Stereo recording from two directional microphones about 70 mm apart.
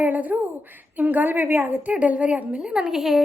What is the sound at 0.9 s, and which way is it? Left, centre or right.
A woman's voice, right.